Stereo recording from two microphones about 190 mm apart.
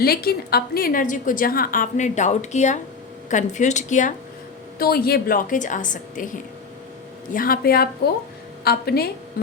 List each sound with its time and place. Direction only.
0.0 s a woman's voice: 55° left (ahead or behind)
4.8 s a woman's voice: 55° left (ahead or behind)